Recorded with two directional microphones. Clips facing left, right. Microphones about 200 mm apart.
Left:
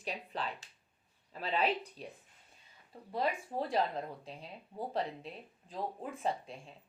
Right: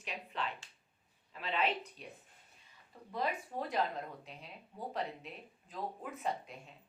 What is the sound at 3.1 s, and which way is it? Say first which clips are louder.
A woman's voice: left 3 dB; 30° left (ahead or behind).